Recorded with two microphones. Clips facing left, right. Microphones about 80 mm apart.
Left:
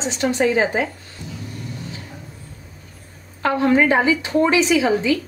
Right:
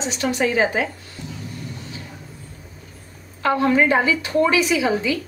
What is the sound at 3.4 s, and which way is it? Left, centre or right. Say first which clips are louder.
A woman's voice: left 1 dB; left.